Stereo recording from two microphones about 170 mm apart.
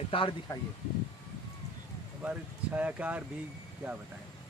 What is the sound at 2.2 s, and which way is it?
Speech, 10° right (ahead or behind).